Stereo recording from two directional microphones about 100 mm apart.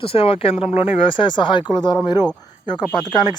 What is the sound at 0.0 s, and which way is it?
Speech, 70° left (ahead or behind).